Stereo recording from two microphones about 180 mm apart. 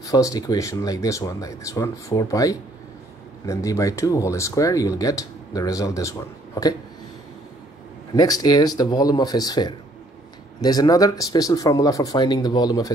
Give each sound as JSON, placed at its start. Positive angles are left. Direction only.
{"t": 0.0, "sound": "speech", "side_deg": 20}
{"t": 8.1, "sound": "speech", "side_deg": 20}